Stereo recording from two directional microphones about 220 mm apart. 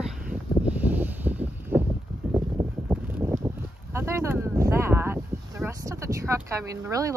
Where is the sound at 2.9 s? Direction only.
10° right (ahead or behind).